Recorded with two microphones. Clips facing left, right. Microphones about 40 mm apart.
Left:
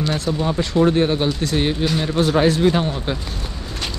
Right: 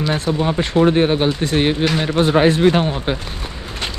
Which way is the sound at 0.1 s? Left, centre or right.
Right.